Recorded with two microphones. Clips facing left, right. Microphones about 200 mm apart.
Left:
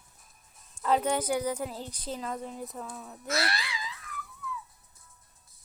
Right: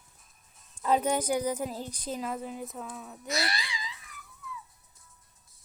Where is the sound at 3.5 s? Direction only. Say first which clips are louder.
Left 1 dB; 15° right (ahead or behind).